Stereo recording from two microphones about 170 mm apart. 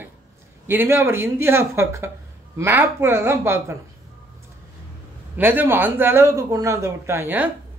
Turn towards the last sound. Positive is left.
turn(degrees=-15)  # may be behind; listen again after turning